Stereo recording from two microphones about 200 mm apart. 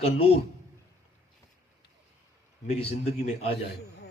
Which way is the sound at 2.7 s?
30° left (ahead or behind).